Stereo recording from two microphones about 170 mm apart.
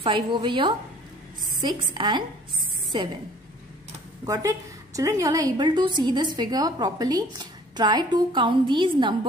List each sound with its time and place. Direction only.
0.0 s a woman's voice: 30° right (ahead or behind)
4.3 s a woman's voice: 20° right (ahead or behind)